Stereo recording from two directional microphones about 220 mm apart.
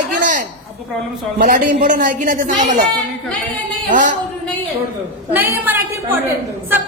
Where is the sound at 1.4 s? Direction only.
40° right (ahead or behind).